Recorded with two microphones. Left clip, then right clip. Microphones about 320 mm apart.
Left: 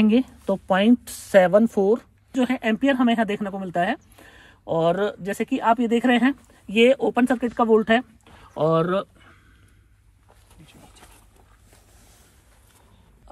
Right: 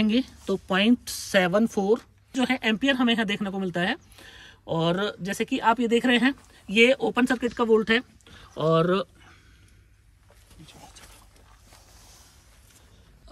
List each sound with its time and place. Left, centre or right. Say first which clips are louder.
0.0 s speech: left 5 dB; centre